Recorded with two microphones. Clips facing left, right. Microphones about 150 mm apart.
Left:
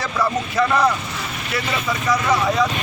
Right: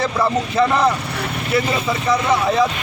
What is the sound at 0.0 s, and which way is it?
Speech, 30° right (ahead or behind).